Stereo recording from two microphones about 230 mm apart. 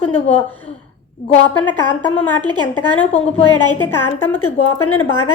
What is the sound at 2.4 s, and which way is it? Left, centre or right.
Speech, centre.